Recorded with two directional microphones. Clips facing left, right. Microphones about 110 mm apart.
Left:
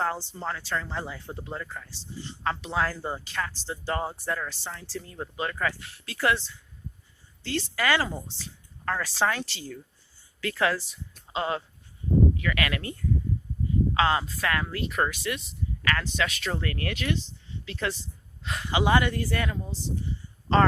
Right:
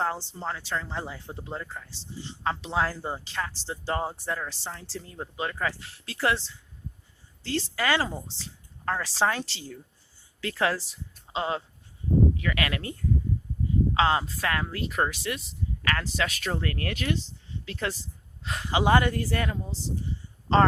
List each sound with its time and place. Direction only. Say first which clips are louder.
0.0 s speech: even; 20° right (ahead or behind)
7.4 s speech: even; 30° right (ahead or behind)
13.9 s speech: right 1 dB; 30° right (ahead or behind)